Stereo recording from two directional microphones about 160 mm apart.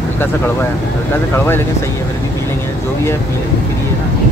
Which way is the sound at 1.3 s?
15° left (ahead or behind).